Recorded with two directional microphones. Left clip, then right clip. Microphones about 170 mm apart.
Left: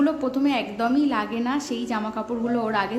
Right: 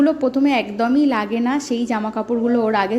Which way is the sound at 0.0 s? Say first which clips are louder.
Right 6 dB; 30° right (ahead or behind).